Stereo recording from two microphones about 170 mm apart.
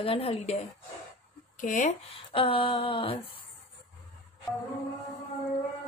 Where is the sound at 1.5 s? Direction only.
50° left (ahead or behind); by 3.2 s 30° left (ahead or behind).